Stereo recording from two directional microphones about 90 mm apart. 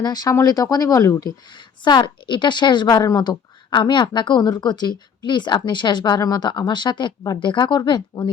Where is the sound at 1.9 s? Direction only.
60° left (ahead or behind).